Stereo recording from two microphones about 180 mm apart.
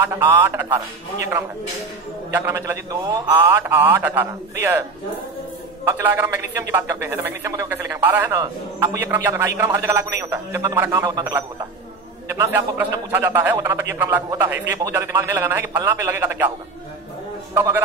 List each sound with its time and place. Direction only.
0.0 s speech: 15° right (ahead or behind)
5.9 s speech: 10° right (ahead or behind)
17.6 s speech: 15° right (ahead or behind)